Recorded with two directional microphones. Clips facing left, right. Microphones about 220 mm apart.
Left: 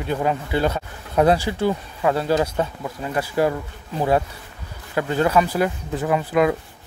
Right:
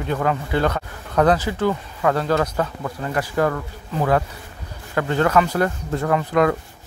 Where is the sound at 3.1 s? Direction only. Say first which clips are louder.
Left 1 dB; 15° left (ahead or behind).